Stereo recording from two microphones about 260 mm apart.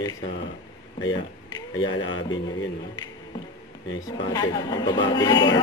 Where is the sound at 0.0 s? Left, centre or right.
Centre.